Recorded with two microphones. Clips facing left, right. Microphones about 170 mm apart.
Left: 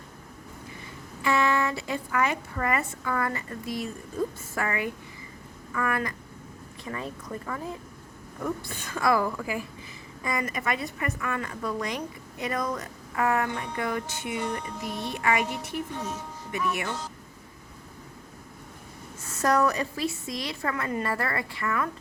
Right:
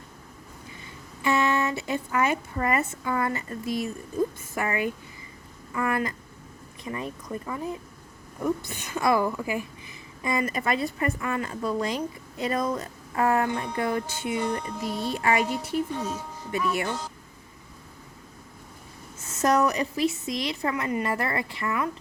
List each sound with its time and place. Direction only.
1.2 s a woman's voice: 25° right (ahead or behind)
19.2 s a woman's voice: 20° right (ahead or behind)